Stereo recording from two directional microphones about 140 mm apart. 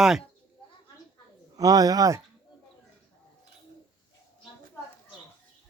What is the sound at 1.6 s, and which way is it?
Speech, 25° right (ahead or behind).